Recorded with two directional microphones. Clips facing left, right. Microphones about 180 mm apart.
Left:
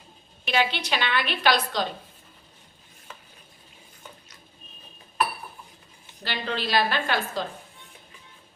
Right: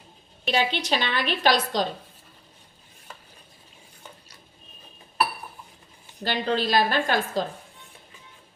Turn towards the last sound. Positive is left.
turn(degrees=-45)  # may be behind; listen again after turning